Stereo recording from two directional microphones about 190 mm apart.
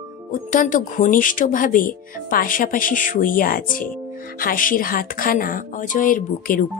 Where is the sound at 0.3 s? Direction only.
45° left (ahead or behind).